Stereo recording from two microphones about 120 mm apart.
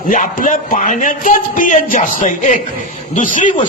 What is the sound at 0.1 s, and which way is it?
Speech, 90° left.